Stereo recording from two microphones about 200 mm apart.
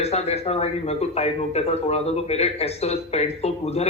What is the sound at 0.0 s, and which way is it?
Speech, 30° left (ahead or behind).